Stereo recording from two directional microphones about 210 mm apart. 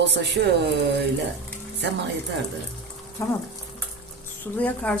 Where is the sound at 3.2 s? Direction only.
15° left (ahead or behind).